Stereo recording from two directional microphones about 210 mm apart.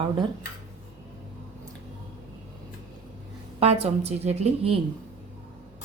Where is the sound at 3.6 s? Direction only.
30° right (ahead or behind).